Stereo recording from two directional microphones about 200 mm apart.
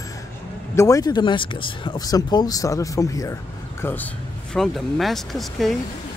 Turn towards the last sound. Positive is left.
turn(degrees=0)  # may be behind; listen again after turning